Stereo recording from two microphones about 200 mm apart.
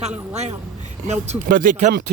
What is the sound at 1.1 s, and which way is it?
Speech, 40° right (ahead or behind).